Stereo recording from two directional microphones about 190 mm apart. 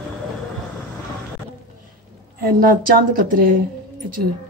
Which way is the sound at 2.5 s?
50° right (ahead or behind).